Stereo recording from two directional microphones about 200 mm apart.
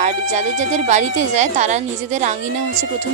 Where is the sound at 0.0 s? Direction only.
35° right (ahead or behind).